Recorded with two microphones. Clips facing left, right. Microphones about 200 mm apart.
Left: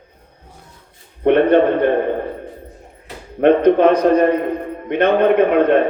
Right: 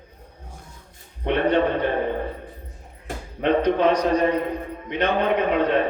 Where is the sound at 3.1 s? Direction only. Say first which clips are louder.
Right 3 dB; 50° right (ahead or behind).